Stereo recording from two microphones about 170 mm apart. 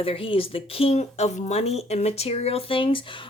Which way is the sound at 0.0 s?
35° left (ahead or behind).